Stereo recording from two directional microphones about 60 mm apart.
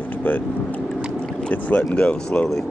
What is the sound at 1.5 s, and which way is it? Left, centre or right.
Speech, left.